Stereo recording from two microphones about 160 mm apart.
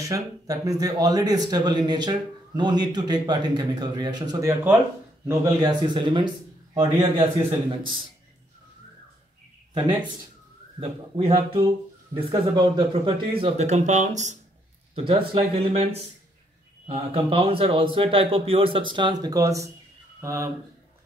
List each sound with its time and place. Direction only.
0.0 s speech: 20° right (ahead or behind)
10.8 s speech: 35° right (ahead or behind)
15.0 s speech: 35° right (ahead or behind); by 20.4 s 20° right (ahead or behind)